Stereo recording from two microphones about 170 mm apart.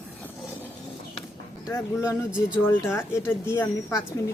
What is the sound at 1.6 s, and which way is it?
Speech, 15° left (ahead or behind).